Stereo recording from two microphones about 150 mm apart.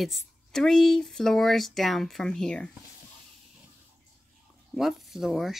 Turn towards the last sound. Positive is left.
turn(degrees=0)  # may be behind; listen again after turning